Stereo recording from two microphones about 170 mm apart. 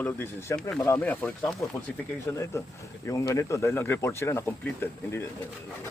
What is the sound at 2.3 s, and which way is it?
Speech, 15° left (ahead or behind).